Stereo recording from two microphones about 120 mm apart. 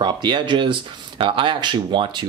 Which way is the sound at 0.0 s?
40° right (ahead or behind).